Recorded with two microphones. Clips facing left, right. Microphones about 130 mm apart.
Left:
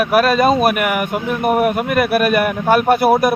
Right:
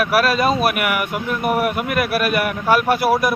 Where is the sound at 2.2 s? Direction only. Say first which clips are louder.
Left 4 dB; 45° left (ahead or behind).